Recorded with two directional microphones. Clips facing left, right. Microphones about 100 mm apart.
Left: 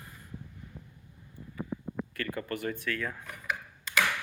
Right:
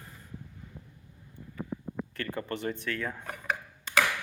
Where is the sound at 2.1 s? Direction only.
25° right (ahead or behind).